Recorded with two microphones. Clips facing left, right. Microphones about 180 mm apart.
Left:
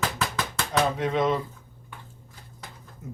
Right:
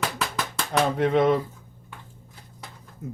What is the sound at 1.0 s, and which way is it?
Speech, 55° right (ahead or behind).